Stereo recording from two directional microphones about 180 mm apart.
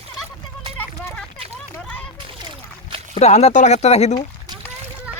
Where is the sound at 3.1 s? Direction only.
35° left (ahead or behind).